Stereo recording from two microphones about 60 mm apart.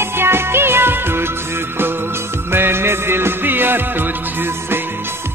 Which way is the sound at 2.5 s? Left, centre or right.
Right.